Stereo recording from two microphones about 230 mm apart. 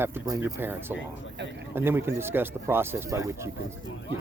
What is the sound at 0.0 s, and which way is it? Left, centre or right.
Speech, centre.